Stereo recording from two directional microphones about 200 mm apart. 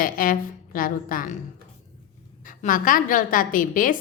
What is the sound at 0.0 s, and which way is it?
A woman's voice, 45° left (ahead or behind).